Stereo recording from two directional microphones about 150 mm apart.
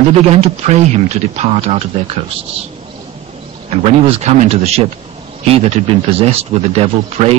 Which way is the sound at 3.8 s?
45° right (ahead or behind).